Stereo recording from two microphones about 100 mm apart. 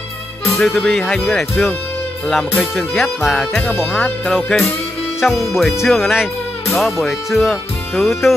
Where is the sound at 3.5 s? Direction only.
20° left (ahead or behind).